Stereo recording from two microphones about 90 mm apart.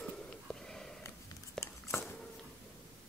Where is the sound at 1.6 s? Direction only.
5° left (ahead or behind).